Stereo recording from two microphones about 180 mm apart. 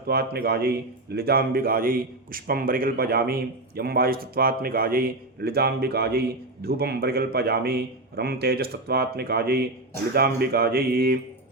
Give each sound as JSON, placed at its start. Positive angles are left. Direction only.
{"t": 0.1, "sound": "a man's voice", "side_deg": -60}